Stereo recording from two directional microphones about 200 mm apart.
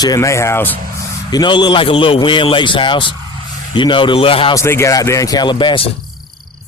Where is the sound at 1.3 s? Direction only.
20° left (ahead or behind).